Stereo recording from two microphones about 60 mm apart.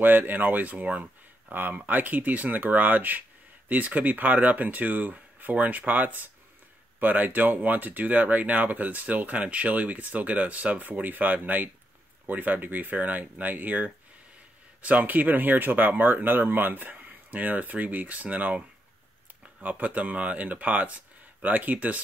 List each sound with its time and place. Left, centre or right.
0.0 s speech: right
19.6 s speech: right